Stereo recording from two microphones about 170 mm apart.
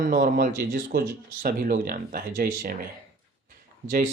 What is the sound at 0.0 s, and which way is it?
Speech, 55° right (ahead or behind).